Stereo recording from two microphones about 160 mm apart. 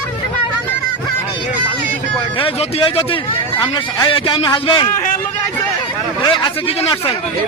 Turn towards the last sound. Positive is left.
turn(degrees=30)  # may be behind; listen again after turning